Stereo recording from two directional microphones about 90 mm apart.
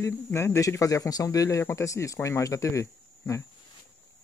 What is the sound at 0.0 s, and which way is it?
Speech, 30° left (ahead or behind).